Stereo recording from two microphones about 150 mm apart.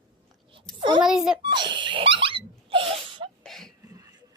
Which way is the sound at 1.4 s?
30° right (ahead or behind).